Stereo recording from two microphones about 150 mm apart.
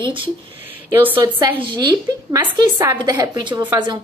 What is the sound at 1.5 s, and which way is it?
Speech, 35° right (ahead or behind).